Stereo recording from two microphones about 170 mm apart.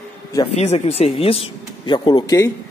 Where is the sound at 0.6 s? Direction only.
40° left (ahead or behind).